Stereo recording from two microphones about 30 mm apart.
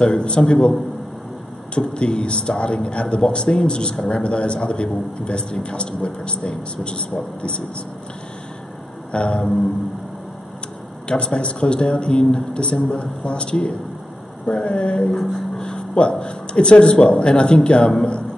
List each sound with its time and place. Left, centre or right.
0.0 s speech: left
2.0 s speech: left
9.1 s speech: left
11.1 s speech: left
15.0 s music: centre
15.9 s speech: left